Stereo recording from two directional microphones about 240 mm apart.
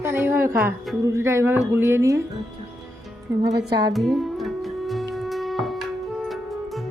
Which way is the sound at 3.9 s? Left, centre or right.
Centre.